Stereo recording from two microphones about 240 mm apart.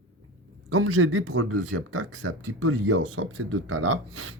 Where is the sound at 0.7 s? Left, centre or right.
Right.